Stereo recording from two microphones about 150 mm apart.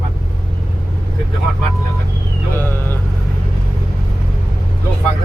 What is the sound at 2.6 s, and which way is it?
Speech, 15° left (ahead or behind).